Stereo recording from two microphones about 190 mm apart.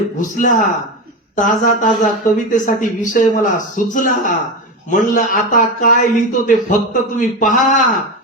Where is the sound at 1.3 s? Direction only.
40° left (ahead or behind).